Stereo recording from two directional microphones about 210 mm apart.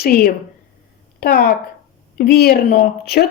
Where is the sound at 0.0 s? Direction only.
45° left (ahead or behind).